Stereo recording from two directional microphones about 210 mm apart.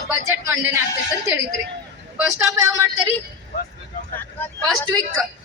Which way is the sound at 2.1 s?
5° right (ahead or behind).